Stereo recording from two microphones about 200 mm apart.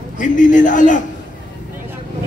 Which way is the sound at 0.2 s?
40° left (ahead or behind).